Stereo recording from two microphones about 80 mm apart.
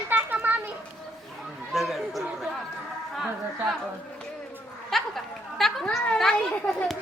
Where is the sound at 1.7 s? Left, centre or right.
Centre.